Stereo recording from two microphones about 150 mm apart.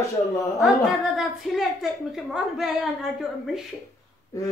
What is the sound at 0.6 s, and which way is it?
A woman's voice, centre (ahead or behind).